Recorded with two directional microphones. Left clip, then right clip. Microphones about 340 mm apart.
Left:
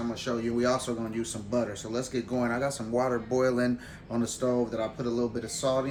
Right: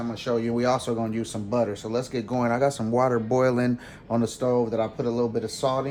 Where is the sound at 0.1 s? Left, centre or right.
Centre.